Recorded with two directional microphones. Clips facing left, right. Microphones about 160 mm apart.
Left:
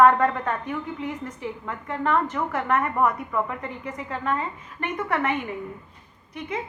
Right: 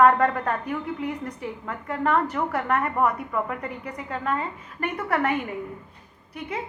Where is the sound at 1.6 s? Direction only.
35° right (ahead or behind).